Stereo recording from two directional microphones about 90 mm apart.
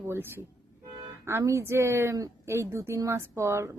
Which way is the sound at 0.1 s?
25° right (ahead or behind).